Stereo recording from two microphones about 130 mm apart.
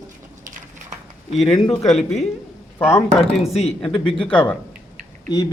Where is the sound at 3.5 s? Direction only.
55° left (ahead or behind).